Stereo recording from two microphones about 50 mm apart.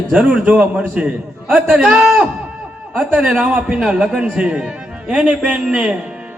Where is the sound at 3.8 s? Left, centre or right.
Centre.